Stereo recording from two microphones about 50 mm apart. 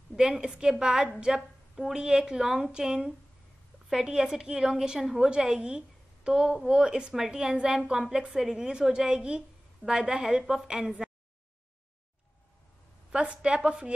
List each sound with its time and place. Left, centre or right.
0.1 s a woman's voice: centre
13.1 s a woman's voice: right